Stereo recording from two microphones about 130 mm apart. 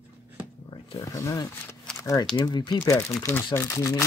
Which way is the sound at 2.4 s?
35° left (ahead or behind).